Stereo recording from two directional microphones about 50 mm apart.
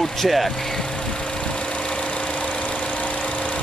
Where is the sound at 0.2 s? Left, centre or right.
Centre.